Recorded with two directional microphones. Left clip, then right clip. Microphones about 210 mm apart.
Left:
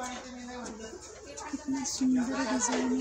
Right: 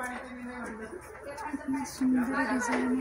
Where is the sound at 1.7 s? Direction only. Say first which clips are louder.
Even; centre (ahead or behind).